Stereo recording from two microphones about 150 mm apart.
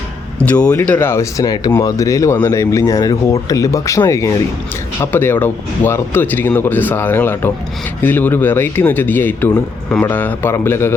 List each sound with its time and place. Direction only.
0.3 s speech: 10° left (ahead or behind)